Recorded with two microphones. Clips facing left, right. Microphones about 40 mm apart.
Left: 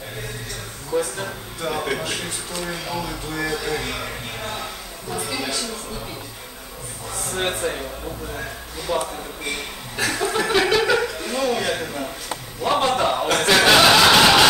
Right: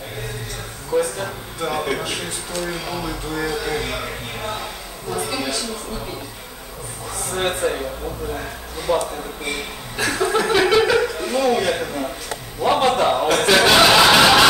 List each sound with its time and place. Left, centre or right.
0.9 s speech: centre
5.1 s a sound: centre
7.2 s speech: centre
8.9 s speech: centre